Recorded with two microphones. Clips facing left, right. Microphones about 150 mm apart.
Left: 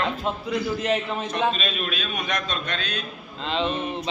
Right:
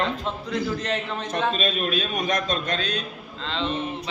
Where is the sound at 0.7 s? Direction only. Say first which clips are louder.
Left 3 dB; 10° left (ahead or behind).